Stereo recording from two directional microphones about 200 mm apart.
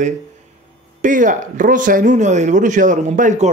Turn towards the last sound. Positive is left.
turn(degrees=-40)  # may be behind; listen again after turning